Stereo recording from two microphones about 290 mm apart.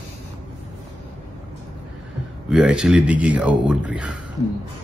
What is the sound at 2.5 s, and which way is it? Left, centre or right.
A man's voice, centre.